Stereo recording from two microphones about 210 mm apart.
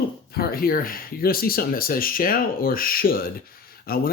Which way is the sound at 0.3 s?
45° left (ahead or behind).